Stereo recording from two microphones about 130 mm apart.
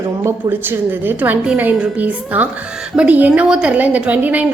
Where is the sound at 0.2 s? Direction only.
20° right (ahead or behind).